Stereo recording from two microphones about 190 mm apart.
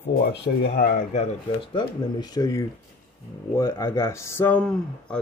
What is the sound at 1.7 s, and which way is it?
Speech, 25° left (ahead or behind).